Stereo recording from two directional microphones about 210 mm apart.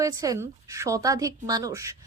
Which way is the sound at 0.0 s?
15° right (ahead or behind).